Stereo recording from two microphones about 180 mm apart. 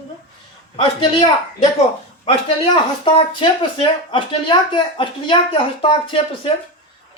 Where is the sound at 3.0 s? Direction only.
30° left (ahead or behind).